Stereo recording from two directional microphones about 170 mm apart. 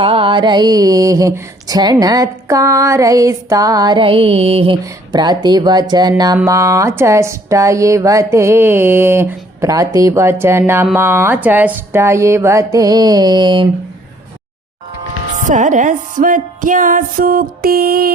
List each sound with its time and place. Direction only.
0.0 s a sound: 30° right (ahead or behind)
5.9 s speech: 25° right (ahead or behind)
15.4 s music: 50° right (ahead or behind)